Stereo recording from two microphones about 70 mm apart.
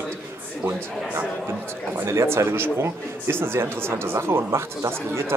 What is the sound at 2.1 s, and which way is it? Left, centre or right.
Speech, right.